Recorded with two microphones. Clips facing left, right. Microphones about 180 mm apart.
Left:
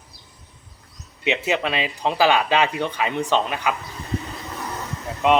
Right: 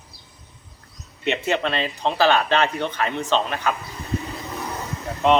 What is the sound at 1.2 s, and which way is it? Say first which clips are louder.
Speech: even; 5° left (ahead or behind).